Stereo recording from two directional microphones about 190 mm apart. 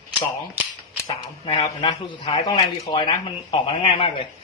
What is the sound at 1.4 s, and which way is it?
Speech, 25° left (ahead or behind).